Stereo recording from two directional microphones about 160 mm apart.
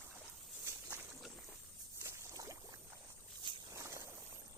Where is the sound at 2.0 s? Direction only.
20° right (ahead or behind).